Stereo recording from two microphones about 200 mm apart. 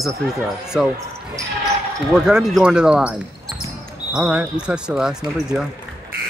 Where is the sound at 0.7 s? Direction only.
Centre (ahead or behind).